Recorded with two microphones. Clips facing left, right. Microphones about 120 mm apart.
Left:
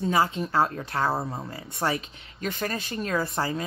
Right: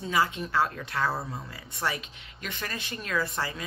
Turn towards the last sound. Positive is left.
turn(degrees=30)  # may be behind; listen again after turning